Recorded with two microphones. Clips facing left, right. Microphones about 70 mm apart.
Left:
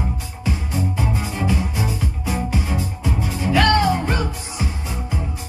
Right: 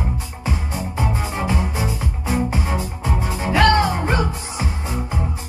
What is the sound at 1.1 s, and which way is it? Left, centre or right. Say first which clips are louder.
Music: even; right.